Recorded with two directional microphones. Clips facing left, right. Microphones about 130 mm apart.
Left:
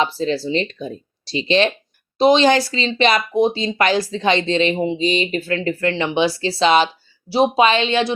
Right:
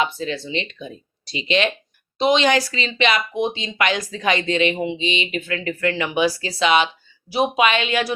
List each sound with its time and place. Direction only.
0.0 s speech: 35° left (ahead or behind)